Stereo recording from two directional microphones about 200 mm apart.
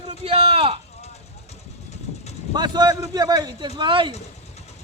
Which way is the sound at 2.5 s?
20° right (ahead or behind).